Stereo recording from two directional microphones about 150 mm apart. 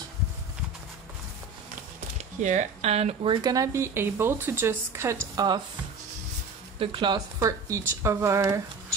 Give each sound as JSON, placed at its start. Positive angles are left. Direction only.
{"t": 2.1, "sound": "speech", "side_deg": -50}
{"t": 3.4, "sound": "speech", "side_deg": -20}
{"t": 6.8, "sound": "speech", "side_deg": -30}